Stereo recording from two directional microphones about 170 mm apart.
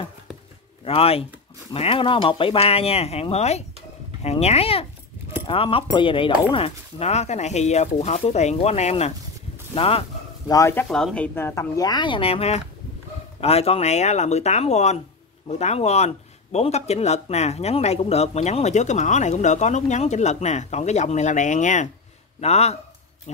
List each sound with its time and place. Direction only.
0.8 s speech: 35° left (ahead or behind)
10.5 s speech: 15° left (ahead or behind)
10.9 s speech: 5° left (ahead or behind)
11.3 s speech: 15° left (ahead or behind); by 23.4 s 40° left (ahead or behind)